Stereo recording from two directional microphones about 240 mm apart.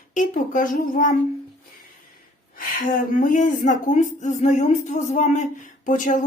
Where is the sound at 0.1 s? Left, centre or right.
Left.